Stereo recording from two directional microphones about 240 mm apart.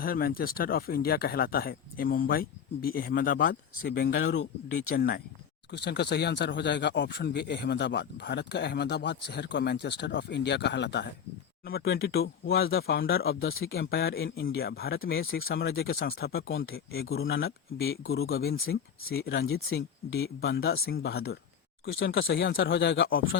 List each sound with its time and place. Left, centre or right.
0.0 s speech: left
15.4 s speech: left
18.1 s speech: left
20.6 s speech: left
20.8 s speech: left
21.9 s speech: left